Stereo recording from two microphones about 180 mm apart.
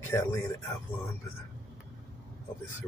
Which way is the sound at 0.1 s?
15° left (ahead or behind).